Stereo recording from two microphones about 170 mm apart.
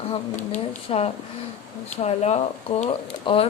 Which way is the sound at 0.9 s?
35° left (ahead or behind).